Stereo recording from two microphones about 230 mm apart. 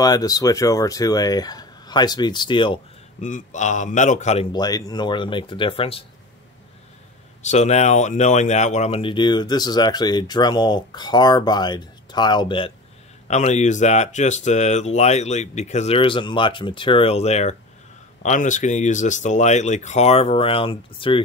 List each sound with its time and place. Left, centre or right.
0.0 s speech: centre
7.4 s speech: left